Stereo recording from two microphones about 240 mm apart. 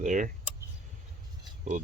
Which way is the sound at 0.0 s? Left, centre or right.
Right.